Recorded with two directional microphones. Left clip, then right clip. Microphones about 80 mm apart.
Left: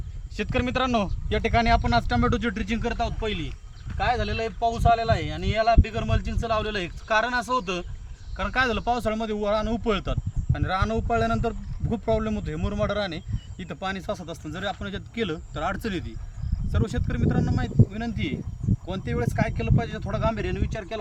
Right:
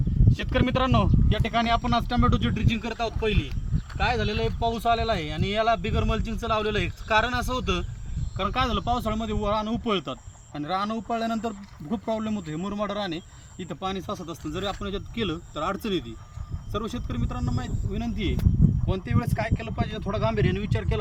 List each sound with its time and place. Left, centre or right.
0.3 s speech: left
3.1 s speech: centre
8.4 s speech: left
16.7 s speech: left; by 20.4 s centre
20.4 s speech: centre